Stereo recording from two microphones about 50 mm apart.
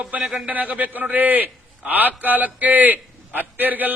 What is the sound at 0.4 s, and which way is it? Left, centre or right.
A man's voice, right.